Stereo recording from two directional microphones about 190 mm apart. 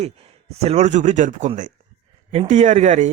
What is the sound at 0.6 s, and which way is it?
Speech, 35° right (ahead or behind).